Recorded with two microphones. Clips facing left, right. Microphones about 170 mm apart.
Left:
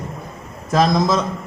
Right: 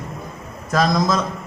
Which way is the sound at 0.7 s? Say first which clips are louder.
Left 2 dB; 25° left (ahead or behind).